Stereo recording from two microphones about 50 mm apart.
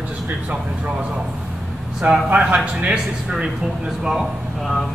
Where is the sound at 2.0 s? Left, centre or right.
Right.